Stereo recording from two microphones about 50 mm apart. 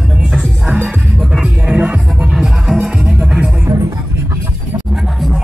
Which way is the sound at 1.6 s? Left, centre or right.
Right.